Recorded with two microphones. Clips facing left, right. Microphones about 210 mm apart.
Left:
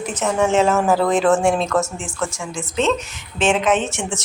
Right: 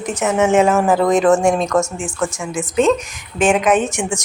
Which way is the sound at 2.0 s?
15° right (ahead or behind).